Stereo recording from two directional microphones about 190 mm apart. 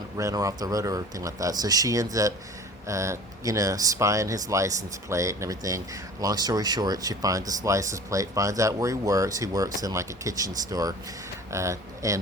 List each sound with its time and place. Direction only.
0.2 s speech: 15° right (ahead or behind)